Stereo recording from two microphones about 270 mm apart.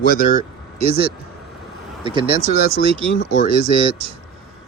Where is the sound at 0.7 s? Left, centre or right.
Right.